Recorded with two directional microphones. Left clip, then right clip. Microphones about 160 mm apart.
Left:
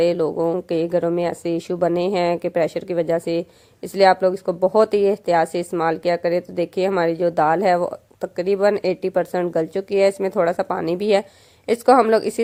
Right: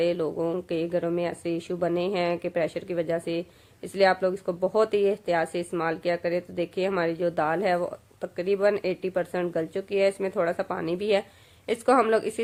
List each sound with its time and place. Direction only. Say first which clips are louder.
0.0 s speech: left 7 dB; 40° left (ahead or behind)